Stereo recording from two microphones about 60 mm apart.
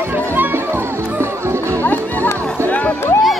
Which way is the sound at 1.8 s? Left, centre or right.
Left.